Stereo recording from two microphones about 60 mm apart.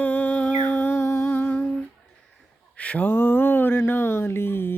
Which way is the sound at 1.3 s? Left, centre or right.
Left.